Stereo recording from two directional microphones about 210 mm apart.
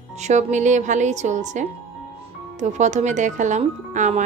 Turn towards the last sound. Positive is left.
turn(degrees=-35)  # may be behind; listen again after turning